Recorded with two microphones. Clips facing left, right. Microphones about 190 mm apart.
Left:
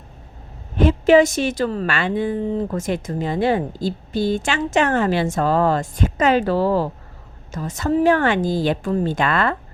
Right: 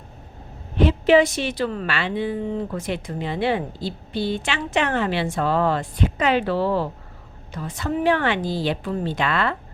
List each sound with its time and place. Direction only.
0.8 s a woman's voice: 45° left (ahead or behind)